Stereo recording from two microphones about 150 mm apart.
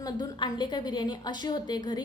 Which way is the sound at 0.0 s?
30° left (ahead or behind).